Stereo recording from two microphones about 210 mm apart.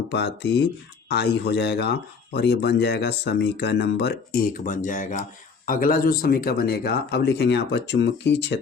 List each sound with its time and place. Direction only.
0.1 s speech: 55° left (ahead or behind)